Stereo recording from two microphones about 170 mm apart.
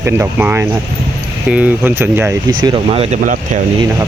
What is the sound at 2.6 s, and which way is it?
Speech, 30° right (ahead or behind).